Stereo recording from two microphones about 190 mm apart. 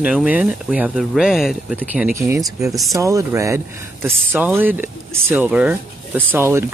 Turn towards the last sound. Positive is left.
turn(degrees=-15)  # may be behind; listen again after turning